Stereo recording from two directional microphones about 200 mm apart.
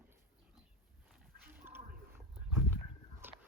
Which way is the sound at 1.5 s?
10° right (ahead or behind).